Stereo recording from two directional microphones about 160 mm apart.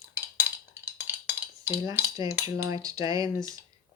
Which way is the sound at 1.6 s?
15° right (ahead or behind).